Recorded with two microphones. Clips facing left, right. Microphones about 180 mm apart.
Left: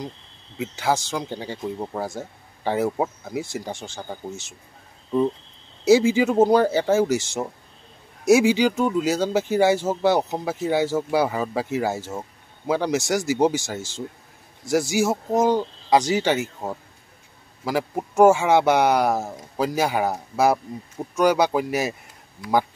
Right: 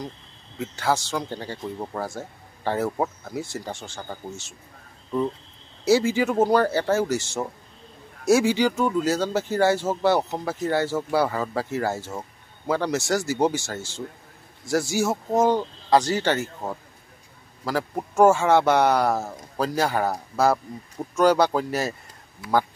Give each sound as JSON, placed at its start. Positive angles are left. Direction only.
{"t": 0.6, "sound": "speech", "side_deg": 15}
{"t": 5.9, "sound": "speech", "side_deg": 15}